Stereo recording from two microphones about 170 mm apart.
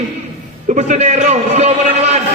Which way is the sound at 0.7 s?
45° right (ahead or behind).